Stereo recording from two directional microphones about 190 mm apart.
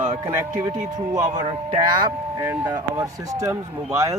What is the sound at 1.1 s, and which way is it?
Speech, 20° right (ahead or behind).